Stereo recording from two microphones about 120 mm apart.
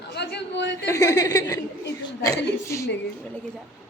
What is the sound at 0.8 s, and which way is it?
A woman's voice, 30° left (ahead or behind).